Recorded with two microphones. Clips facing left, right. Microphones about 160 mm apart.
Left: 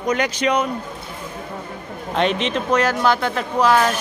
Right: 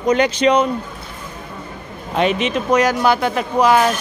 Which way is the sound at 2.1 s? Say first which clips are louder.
Right 2 dB; 5° right (ahead or behind).